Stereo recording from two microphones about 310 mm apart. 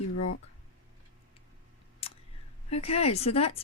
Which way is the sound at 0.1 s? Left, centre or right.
Left.